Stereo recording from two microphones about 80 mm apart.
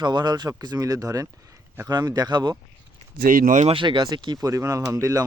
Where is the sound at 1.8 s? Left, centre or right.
Right.